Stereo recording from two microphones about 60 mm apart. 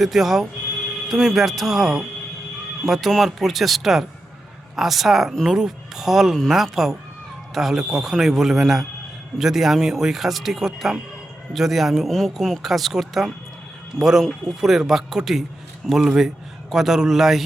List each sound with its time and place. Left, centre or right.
0.0 s speech: centre